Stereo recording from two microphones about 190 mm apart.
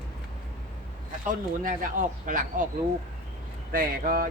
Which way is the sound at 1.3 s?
45° right (ahead or behind).